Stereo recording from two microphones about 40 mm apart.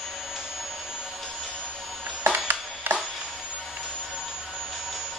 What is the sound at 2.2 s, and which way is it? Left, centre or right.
Music, right.